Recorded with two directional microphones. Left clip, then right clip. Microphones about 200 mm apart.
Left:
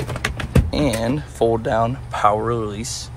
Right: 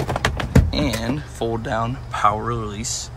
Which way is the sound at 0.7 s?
Centre (ahead or behind).